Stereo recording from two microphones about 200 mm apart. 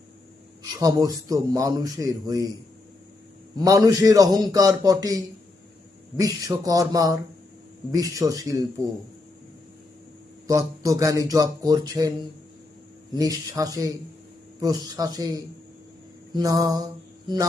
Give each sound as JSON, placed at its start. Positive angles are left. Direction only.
{"t": 0.8, "sound": "speech", "side_deg": -15}
{"t": 3.6, "sound": "speech", "side_deg": -15}
{"t": 10.4, "sound": "speech", "side_deg": -15}
{"t": 13.1, "sound": "speech", "side_deg": -15}